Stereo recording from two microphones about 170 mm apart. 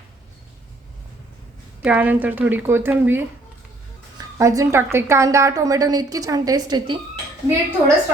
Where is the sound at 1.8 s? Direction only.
10° right (ahead or behind).